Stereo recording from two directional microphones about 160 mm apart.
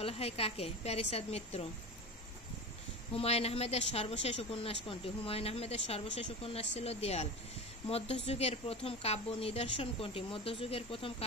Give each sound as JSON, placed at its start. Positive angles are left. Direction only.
{"t": 0.0, "sound": "a woman's voice", "side_deg": 40}
{"t": 3.1, "sound": "a woman's voice", "side_deg": 40}